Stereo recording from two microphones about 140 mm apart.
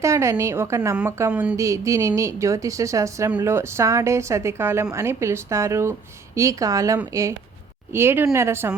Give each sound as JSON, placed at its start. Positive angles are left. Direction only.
{"t": 0.0, "sound": "a woman's voice", "side_deg": -20}
{"t": 1.3, "sound": "speech", "side_deg": -10}
{"t": 1.5, "sound": "a woman's voice", "side_deg": -20}